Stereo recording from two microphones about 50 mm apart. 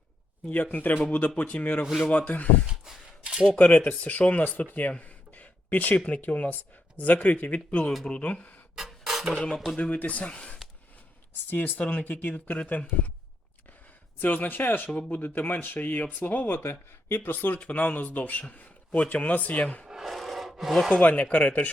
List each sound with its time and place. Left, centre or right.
0.5 s speech: left
1.8 s speech: centre
2.0 s speech: left
2.6 s a sound: centre
3.6 s speech: left
8.7 s a sound: centre
9.7 s speech: left
11.4 s speech: left
14.2 s speech: left
17.1 s speech: left
17.6 s speech: left
19.9 s rub: centre
20.9 s speech: left